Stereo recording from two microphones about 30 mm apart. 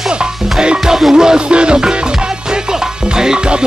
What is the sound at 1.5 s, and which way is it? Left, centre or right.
Music, right.